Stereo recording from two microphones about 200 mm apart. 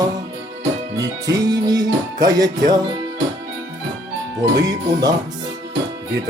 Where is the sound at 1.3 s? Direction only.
20° right (ahead or behind).